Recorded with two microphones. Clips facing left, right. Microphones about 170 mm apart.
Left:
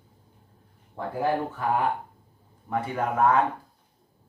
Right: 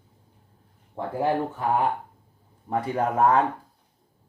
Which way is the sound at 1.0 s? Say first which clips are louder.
Right 2 dB; 25° right (ahead or behind).